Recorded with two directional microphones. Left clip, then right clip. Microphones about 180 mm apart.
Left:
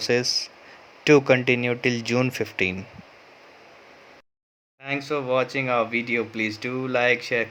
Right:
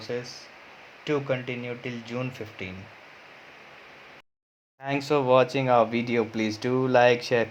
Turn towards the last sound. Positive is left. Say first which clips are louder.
# right 1 dB
turn(degrees=-10)  # may be behind; listen again after turning